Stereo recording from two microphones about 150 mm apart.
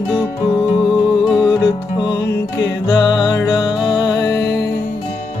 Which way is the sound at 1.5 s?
25° left (ahead or behind).